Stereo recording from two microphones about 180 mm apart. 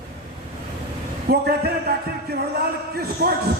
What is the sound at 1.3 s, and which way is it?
Speech, 60° right (ahead or behind).